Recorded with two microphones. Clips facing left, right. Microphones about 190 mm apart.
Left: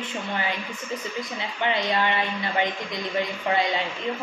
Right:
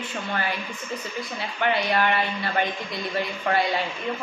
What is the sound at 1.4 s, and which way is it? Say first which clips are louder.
A woman's voice: right 2 dB; 20° left (ahead or behind).